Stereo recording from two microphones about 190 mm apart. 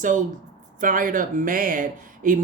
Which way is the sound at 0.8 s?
45° right (ahead or behind).